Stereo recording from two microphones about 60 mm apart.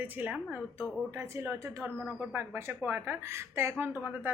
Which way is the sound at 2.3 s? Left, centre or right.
Right.